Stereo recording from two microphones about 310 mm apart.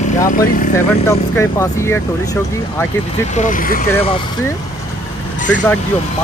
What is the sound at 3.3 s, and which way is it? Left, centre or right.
Speech, left.